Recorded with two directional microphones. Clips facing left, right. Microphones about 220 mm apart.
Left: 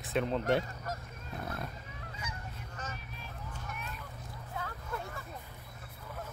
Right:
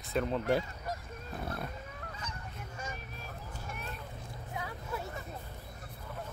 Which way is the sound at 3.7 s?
35° right (ahead or behind).